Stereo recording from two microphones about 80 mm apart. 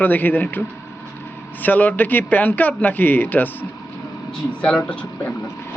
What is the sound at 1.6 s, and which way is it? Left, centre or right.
Speech, left.